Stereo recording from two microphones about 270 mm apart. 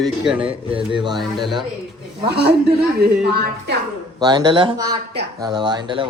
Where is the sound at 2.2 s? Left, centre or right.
Right.